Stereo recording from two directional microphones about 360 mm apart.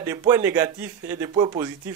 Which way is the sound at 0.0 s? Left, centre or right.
Centre.